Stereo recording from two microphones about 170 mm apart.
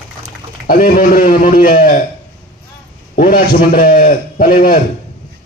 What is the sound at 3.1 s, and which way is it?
A man's voice, 55° left (ahead or behind).